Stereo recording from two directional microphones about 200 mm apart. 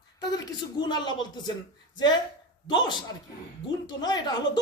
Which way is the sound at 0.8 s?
20° left (ahead or behind).